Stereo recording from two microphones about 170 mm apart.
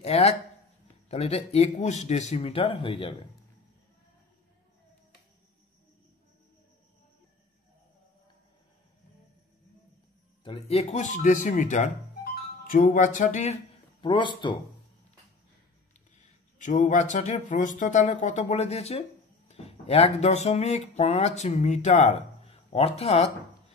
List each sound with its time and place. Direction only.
0.0 s speech: 40° left (ahead or behind)
10.4 s speech: 35° left (ahead or behind)
14.0 s speech: 30° left (ahead or behind)
16.5 s speech: 45° left (ahead or behind)